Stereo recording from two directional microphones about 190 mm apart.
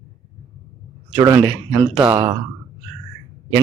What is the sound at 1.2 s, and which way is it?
A man's voice, 15° right (ahead or behind).